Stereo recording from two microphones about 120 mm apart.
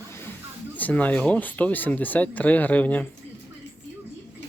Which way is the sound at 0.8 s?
15° left (ahead or behind).